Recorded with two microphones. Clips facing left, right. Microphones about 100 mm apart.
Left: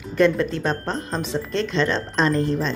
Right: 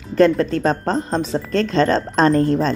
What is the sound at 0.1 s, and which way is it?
Speech, 35° right (ahead or behind).